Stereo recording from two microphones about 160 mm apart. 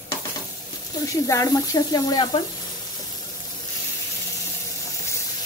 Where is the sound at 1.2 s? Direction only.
20° left (ahead or behind).